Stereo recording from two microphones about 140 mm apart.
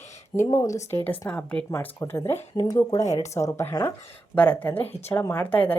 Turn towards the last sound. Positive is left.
turn(degrees=10)  # may be behind; listen again after turning